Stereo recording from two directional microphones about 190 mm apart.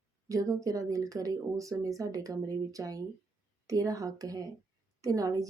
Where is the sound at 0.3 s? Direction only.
15° right (ahead or behind).